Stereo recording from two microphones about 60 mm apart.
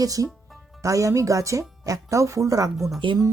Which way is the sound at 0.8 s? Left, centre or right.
Right.